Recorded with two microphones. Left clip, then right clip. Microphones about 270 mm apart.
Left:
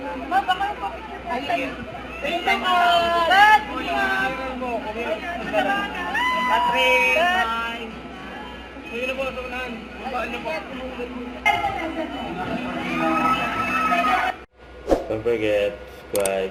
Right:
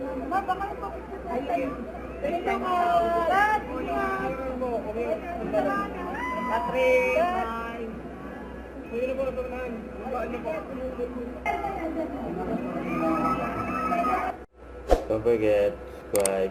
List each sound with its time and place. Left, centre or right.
0.3 s a man's voice: centre
9.0 s a man's voice: centre
14.8 s speech: centre